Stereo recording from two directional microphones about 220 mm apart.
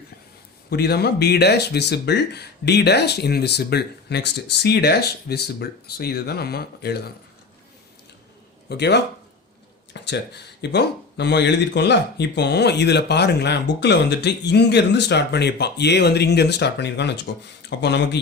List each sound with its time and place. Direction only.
0.7 s speech: 45° left (ahead or behind)
8.7 s speech: 50° left (ahead or behind)